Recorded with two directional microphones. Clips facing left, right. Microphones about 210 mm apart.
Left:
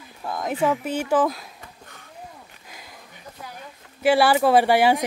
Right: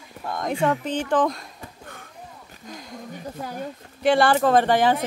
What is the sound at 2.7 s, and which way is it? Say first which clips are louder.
Speech: right 9 dB; 5° left (ahead or behind).